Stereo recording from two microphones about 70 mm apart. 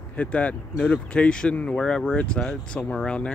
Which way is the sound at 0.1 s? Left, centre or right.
Left.